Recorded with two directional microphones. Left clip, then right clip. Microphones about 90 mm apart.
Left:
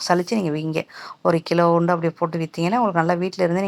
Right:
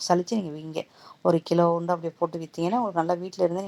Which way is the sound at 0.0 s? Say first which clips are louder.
Left 4 dB; 20° left (ahead or behind).